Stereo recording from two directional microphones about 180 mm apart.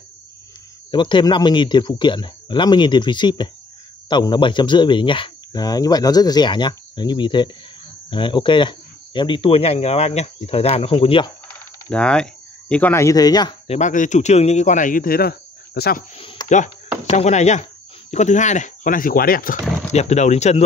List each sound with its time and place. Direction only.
0.9 s speech: 25° left (ahead or behind)
11.9 s speech: 5° left (ahead or behind); by 13.6 s 20° left (ahead or behind)
13.7 s speech: 40° left (ahead or behind); by 16.0 s 60° left (ahead or behind)
16.2 s a sound: 30° left (ahead or behind)
16.4 s speech: 45° left (ahead or behind)
19.9 s speech: 40° left (ahead or behind)